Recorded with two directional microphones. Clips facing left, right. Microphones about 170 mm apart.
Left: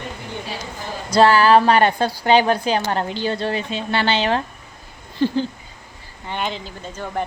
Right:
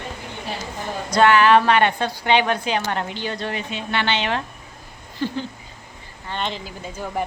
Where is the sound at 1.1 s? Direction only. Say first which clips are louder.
Left 2 dB; 35° left (ahead or behind).